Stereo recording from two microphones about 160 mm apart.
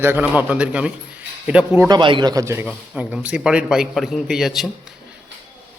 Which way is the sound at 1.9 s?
30° right (ahead or behind).